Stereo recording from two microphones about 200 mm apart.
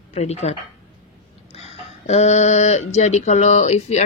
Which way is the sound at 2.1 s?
35° left (ahead or behind).